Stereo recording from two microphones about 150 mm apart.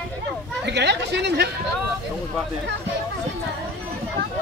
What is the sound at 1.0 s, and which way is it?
Speech, 90° right.